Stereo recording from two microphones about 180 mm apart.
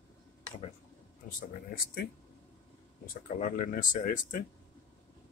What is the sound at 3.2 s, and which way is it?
Speech, 45° left (ahead or behind).